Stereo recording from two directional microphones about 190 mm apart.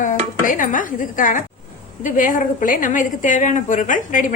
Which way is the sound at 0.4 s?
45° left (ahead or behind).